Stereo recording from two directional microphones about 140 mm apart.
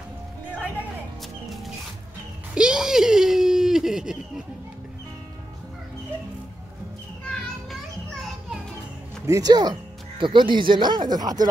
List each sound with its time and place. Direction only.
2.5 s a sound: 5° right (ahead or behind)
7.2 s children playing: centre (ahead or behind)
9.2 s speech: 25° right (ahead or behind)